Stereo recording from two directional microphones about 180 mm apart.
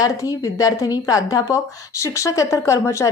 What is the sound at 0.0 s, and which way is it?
A woman's voice, 20° left (ahead or behind).